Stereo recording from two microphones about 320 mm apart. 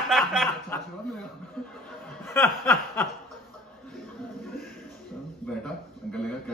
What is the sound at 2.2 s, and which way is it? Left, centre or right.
Snicker, centre.